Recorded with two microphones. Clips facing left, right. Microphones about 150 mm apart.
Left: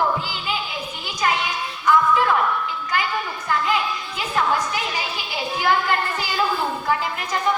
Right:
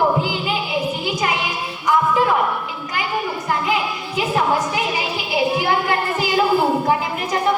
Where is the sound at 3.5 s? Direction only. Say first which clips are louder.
Even; 15° right (ahead or behind).